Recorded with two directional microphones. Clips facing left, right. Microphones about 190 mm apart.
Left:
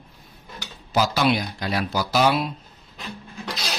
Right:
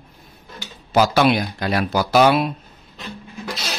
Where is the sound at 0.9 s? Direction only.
60° right (ahead or behind).